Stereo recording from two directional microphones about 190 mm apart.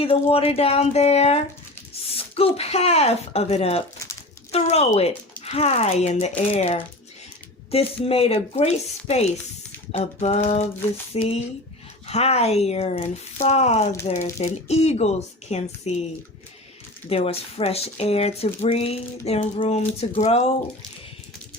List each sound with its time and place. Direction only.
0.0 s speech: 30° left (ahead or behind)
17.1 s speech: 30° left (ahead or behind)